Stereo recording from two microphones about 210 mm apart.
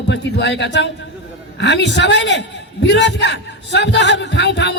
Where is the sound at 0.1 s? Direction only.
55° left (ahead or behind).